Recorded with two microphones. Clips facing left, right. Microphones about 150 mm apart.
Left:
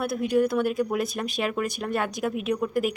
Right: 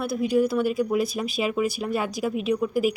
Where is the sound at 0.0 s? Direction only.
Centre (ahead or behind).